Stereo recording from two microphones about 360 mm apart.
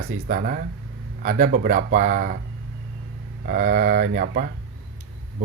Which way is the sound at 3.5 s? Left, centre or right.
Right.